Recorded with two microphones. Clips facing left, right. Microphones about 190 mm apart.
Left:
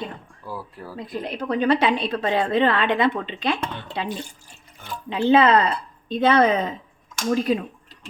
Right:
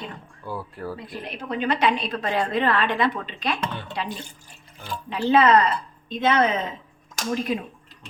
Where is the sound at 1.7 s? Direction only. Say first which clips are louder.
Left 2 dB; 30° left (ahead or behind).